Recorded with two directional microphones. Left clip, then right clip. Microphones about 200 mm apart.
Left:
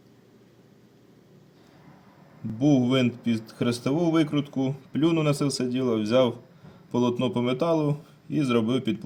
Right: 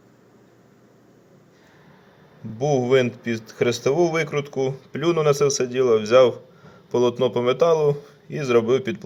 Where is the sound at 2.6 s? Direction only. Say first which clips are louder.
Right 4 dB; centre (ahead or behind).